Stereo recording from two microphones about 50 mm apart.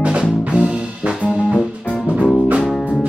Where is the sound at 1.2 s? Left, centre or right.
Left.